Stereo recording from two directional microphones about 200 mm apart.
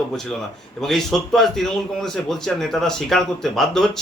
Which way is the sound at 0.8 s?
Centre (ahead or behind).